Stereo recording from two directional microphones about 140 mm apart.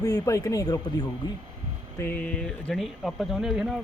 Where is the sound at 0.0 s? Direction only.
25° left (ahead or behind).